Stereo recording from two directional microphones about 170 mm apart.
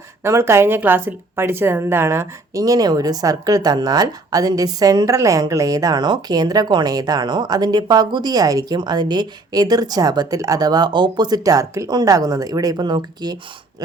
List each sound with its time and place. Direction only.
0.3 s a woman's voice: 15° right (ahead or behind)